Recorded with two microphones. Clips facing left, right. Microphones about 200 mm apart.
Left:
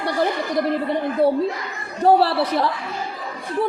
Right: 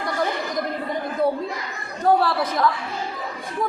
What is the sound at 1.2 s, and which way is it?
A woman's voice, 30° left (ahead or behind).